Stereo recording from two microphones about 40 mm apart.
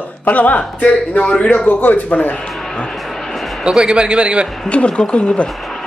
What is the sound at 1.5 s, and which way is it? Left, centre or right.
Speech, left.